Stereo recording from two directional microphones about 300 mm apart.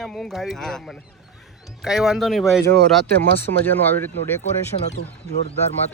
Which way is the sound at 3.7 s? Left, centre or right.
Centre.